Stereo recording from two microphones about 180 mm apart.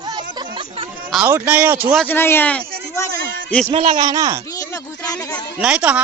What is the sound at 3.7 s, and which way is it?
Speech, 30° right (ahead or behind).